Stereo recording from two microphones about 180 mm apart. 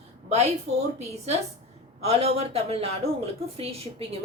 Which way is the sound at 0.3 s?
35° right (ahead or behind).